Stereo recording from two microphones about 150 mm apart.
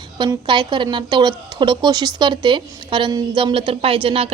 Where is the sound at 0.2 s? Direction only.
30° right (ahead or behind).